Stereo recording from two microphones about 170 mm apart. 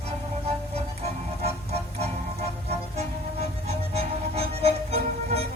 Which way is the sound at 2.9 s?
35° right (ahead or behind).